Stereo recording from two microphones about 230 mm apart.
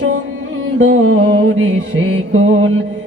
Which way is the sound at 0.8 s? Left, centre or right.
Right.